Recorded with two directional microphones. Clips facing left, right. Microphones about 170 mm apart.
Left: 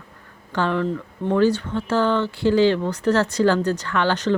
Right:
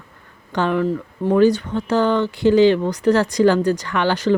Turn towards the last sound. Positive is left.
turn(degrees=-10)  # may be behind; listen again after turning